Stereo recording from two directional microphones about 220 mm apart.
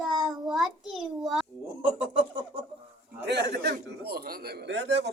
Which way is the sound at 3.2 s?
50° right (ahead or behind).